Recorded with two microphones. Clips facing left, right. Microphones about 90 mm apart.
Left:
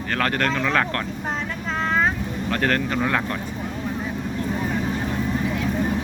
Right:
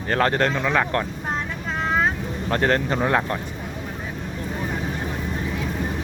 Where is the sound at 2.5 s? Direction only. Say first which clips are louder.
Right 2 dB; 25° right (ahead or behind).